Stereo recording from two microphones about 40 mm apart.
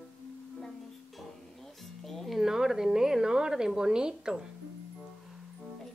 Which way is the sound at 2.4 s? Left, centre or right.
Centre.